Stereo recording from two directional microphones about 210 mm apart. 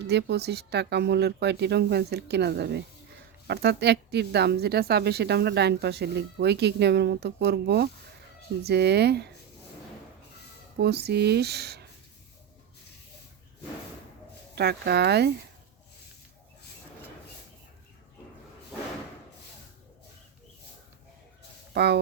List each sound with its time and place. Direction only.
0.1 s speech: 55° right (ahead or behind)
10.8 s speech: 50° right (ahead or behind)
14.5 s speech: 50° right (ahead or behind)
21.7 s speech: 50° right (ahead or behind)